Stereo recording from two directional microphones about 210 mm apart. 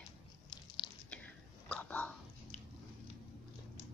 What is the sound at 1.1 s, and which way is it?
Whispering, 5° left (ahead or behind).